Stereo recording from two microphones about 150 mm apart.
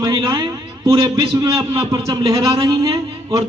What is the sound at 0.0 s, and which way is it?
A man's voice, 25° right (ahead or behind).